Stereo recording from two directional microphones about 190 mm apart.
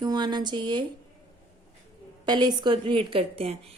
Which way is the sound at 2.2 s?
20° right (ahead or behind).